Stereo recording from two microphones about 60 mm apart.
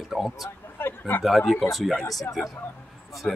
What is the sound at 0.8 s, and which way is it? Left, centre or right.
Speech, left.